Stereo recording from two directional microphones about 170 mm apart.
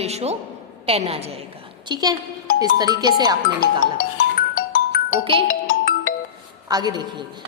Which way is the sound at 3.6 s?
55° left (ahead or behind).